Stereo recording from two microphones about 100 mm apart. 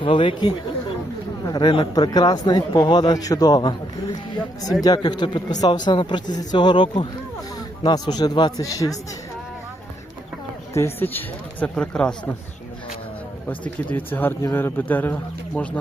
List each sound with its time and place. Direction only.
0.0 s speech: 55° left (ahead or behind); by 9.0 s 35° left (ahead or behind)
10.8 s speech: 20° left (ahead or behind)
11.6 s speech: 10° left (ahead or behind)
13.5 s speech: 20° left (ahead or behind)